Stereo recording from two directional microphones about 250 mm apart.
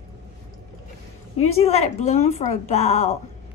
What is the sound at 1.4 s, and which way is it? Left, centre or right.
A woman's voice, left.